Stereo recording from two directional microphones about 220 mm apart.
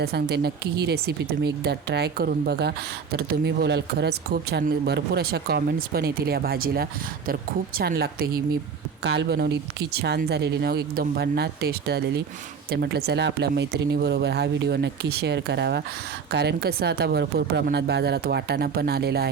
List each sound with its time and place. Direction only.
0.0 s speech: 45° right (ahead or behind)